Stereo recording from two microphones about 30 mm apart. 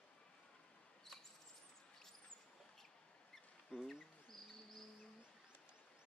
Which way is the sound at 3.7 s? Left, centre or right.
Right.